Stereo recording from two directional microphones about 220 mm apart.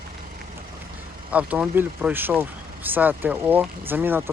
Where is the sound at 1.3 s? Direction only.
5° right (ahead or behind).